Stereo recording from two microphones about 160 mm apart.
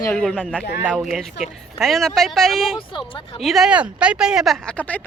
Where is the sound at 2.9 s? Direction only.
30° left (ahead or behind).